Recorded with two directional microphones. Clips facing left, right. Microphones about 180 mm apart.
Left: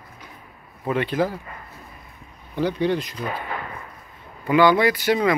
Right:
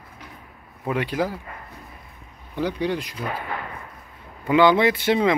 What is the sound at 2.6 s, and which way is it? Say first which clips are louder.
Speech: left 3 dB; 10° right (ahead or behind).